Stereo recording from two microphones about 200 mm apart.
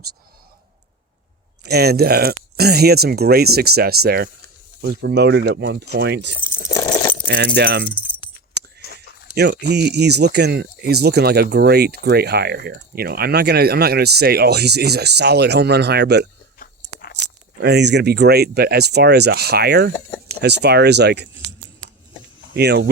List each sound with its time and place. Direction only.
1.6 s speech: 55° right (ahead or behind)
6.5 s coin: 15° left (ahead or behind)
7.3 s speech: 55° right (ahead or behind)
7.9 s speech: 5° left (ahead or behind)
8.8 s a sound: 50° left (ahead or behind)
9.3 s speech: 55° right (ahead or behind)
16.6 s chewing: 50° left (ahead or behind)
17.6 s speech: 55° right (ahead or behind)
22.5 s speech: 55° right (ahead or behind)